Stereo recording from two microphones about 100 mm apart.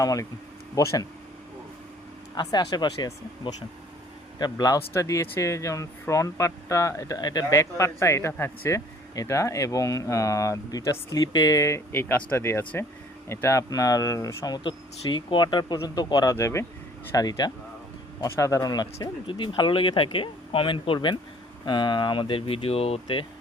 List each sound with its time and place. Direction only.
0.0 s speech: 35° left (ahead or behind)
2.3 s speech: 45° left (ahead or behind)
14.7 s speech: 55° left (ahead or behind)
16.0 s speech: 35° left (ahead or behind)
17.2 s speech: 45° left (ahead or behind)
18.3 s speech: 30° left (ahead or behind)
19.3 s speech: 55° left (ahead or behind); by 23.2 s 70° left (ahead or behind)